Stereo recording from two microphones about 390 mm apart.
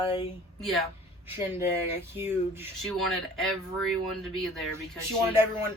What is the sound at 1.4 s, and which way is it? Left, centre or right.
Speech, centre.